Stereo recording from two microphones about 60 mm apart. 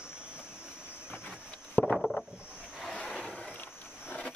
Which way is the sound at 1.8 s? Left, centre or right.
Left.